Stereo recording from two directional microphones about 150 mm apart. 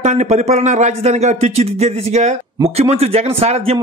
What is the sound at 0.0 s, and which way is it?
A man's voice, 50° right (ahead or behind).